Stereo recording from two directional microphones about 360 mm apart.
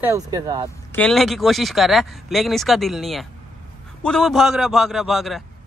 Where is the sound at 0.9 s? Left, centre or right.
Centre.